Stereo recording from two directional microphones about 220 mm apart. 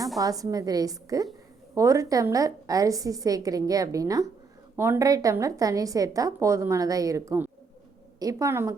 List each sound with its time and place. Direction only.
0.2 s a woman's voice: 15° right (ahead or behind)